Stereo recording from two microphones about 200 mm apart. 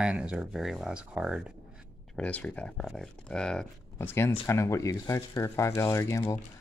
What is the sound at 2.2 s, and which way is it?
Speech, 5° left (ahead or behind).